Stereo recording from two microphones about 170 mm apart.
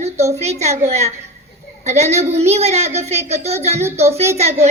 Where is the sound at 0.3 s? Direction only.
40° right (ahead or behind).